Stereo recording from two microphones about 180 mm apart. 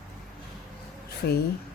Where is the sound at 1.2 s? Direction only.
60° left (ahead or behind).